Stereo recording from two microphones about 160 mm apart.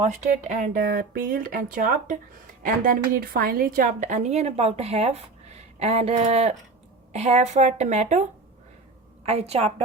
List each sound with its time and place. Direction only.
0.0 s a woman's voice: 50° right (ahead or behind)
9.2 s a woman's voice: 40° right (ahead or behind)